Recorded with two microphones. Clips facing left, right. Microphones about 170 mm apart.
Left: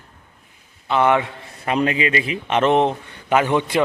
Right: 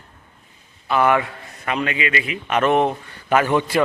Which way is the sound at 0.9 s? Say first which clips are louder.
Even; 25° left (ahead or behind).